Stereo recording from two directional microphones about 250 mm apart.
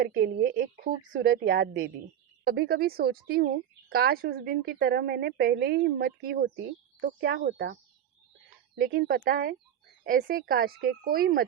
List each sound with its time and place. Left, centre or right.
0.0 s a woman's voice: right